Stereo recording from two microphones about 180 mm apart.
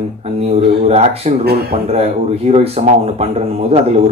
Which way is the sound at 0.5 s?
35° right (ahead or behind).